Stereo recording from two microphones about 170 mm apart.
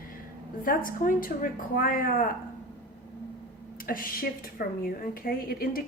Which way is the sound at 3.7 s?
55° left (ahead or behind).